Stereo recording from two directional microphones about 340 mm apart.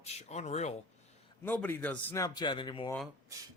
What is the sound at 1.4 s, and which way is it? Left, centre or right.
Speech, centre.